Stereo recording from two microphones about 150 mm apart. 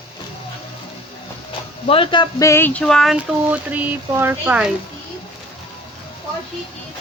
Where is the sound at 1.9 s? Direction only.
35° left (ahead or behind).